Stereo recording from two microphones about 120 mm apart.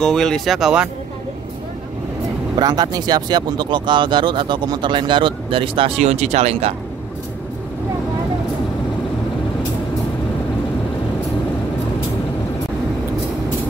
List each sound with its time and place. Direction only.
0.0 s speech: 5° left (ahead or behind)
2.6 s speech: 35° right (ahead or behind); by 6.7 s 60° right (ahead or behind)